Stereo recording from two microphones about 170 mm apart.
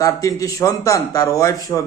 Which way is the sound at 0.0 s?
20° left (ahead or behind).